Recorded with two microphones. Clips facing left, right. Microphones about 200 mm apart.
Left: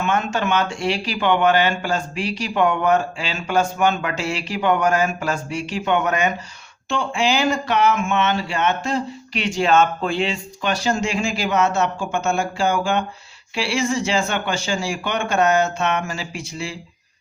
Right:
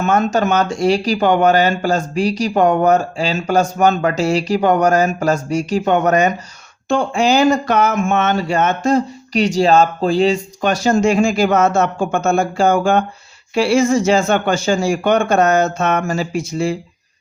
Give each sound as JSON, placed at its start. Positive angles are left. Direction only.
{"t": 0.0, "sound": "speech", "side_deg": -40}